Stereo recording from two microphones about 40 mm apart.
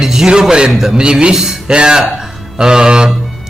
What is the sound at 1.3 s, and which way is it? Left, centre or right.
Speech, centre.